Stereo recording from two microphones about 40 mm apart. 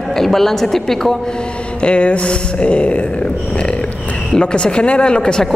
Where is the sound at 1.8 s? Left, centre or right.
Left.